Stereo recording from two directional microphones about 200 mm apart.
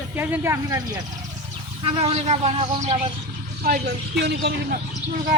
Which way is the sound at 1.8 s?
30° right (ahead or behind).